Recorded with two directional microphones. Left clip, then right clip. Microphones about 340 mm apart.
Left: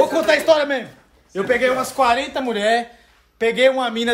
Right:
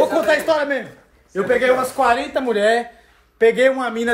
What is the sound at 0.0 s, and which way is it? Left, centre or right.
A man's voice, centre.